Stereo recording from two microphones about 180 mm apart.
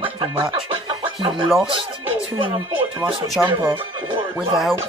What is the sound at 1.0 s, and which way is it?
Chicken, 30° right (ahead or behind).